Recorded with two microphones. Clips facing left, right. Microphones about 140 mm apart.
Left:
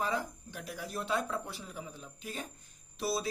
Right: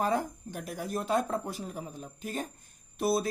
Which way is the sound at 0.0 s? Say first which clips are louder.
Right 5 dB; 50° right (ahead or behind).